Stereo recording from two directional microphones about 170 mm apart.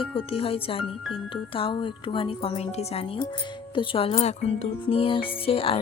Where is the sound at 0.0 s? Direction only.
30° left (ahead or behind).